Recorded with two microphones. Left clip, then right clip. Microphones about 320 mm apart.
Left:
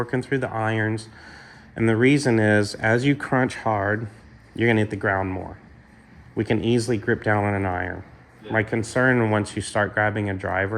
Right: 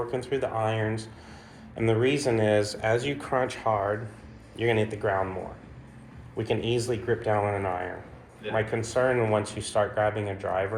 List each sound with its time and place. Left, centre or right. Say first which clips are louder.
0.1 s speech: left 3 dB; left